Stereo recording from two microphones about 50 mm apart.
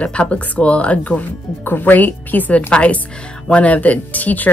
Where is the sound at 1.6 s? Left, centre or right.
Left.